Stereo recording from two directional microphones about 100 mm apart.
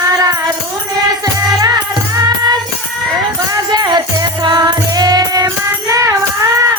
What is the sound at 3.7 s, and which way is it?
Music, 45° right (ahead or behind).